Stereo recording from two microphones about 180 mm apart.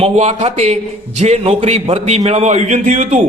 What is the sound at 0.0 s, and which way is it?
A man's voice, 40° right (ahead or behind).